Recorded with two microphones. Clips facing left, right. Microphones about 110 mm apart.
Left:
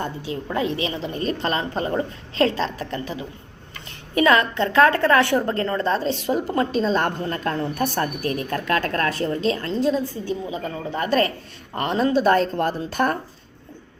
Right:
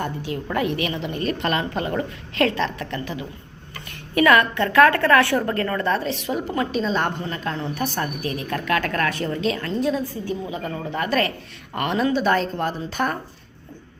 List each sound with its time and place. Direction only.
0.5 s a woman's voice: 25° left (ahead or behind); by 13.1 s 45° left (ahead or behind)